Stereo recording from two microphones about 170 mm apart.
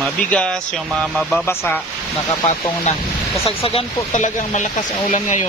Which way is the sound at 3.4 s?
35° left (ahead or behind).